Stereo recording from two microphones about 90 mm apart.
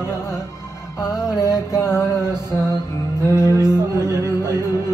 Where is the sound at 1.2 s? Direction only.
35° left (ahead or behind).